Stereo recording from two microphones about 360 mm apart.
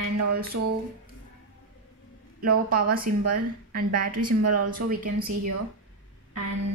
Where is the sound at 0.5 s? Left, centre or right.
Right.